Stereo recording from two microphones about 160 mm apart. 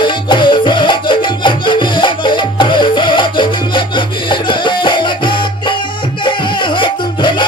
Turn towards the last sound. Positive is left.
turn(degrees=30)  # may be behind; listen again after turning